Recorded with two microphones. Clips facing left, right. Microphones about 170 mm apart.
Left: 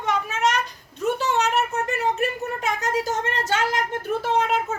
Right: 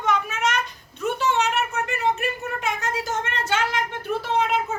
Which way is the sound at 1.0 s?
40° left (ahead or behind).